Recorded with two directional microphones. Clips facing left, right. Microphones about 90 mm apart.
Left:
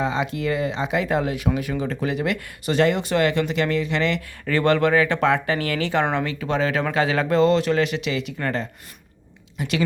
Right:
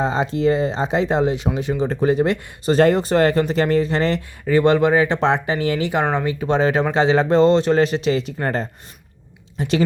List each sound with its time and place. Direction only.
0.0 s speech: 35° right (ahead or behind)
4.4 s a woman's voice: 20° right (ahead or behind)